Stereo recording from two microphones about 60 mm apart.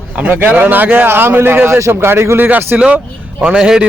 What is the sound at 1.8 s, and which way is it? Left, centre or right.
Speech, right.